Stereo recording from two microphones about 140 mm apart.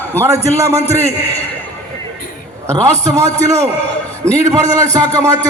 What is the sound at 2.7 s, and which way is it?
A man's voice, 25° right (ahead or behind).